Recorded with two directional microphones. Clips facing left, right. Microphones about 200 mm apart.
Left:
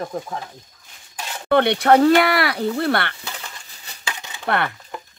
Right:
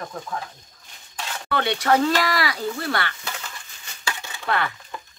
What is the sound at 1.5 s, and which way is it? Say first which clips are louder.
Speech: left 6 dB; 60° left (ahead or behind).